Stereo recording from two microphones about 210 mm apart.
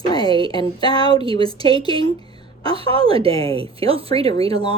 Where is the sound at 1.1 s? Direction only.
25° right (ahead or behind).